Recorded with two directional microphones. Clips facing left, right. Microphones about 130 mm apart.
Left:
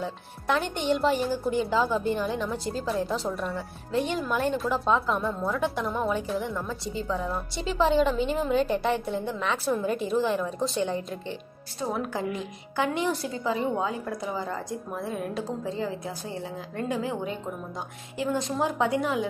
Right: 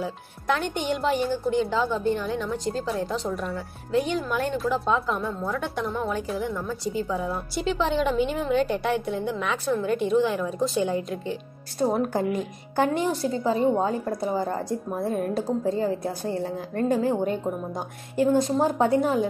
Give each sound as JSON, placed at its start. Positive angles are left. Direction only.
{"t": 0.0, "sound": "a woman's voice", "side_deg": 0}
{"t": 11.8, "sound": "a woman's voice", "side_deg": -45}
{"t": 13.0, "sound": "a woman's voice", "side_deg": -35}